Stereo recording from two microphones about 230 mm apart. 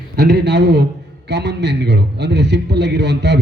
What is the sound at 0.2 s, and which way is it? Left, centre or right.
A man's voice, right.